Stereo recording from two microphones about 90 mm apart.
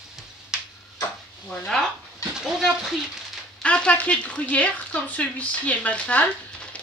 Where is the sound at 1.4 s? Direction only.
5° left (ahead or behind).